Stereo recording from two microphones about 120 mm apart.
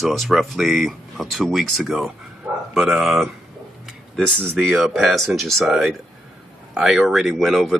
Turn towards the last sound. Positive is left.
turn(degrees=0)  # may be behind; listen again after turning